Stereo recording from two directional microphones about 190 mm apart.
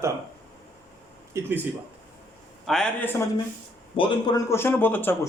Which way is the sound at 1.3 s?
10° right (ahead or behind).